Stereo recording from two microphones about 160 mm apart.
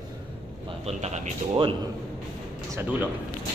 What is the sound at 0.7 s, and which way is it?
Speech, 40° right (ahead or behind).